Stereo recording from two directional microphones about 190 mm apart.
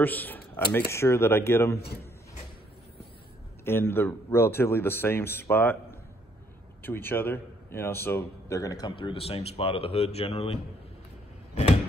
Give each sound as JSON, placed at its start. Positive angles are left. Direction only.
{"t": 0.0, "sound": "speech", "side_deg": 10}
{"t": 3.6, "sound": "a man's voice", "side_deg": 10}